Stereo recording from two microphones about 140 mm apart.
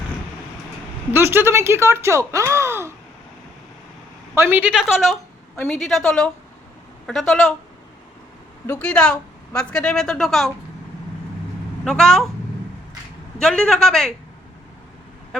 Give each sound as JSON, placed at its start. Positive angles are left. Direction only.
{"t": 1.1, "sound": "speech", "side_deg": -15}
{"t": 4.4, "sound": "a woman's voice", "side_deg": -10}
{"t": 8.8, "sound": "a woman's voice", "side_deg": 5}
{"t": 11.9, "sound": "a woman's voice", "side_deg": 5}
{"t": 13.4, "sound": "a woman's voice", "side_deg": 5}